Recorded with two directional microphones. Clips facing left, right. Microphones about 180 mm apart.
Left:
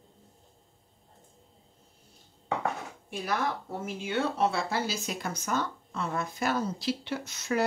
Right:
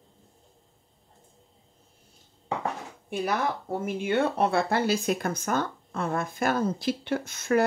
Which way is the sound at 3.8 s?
55° right (ahead or behind).